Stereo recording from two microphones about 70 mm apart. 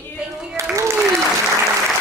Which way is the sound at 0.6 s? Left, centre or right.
Right.